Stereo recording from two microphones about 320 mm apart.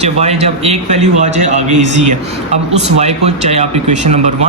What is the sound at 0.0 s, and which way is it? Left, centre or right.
Speech, centre.